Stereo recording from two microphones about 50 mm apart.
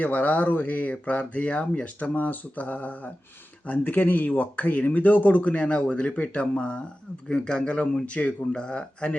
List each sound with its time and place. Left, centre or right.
0.0 s speech: left